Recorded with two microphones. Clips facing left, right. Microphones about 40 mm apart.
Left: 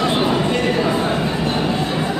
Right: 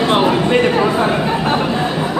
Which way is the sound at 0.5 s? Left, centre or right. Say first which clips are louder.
Right 4 dB; right.